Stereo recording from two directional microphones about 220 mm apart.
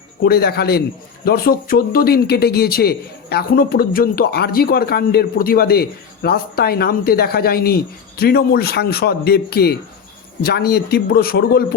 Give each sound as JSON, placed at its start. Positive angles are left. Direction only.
{"t": 0.2, "sound": "speech", "side_deg": 45}